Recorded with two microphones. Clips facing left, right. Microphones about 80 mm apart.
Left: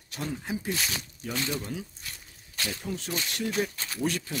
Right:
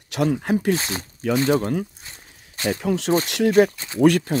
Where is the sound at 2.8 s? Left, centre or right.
Right.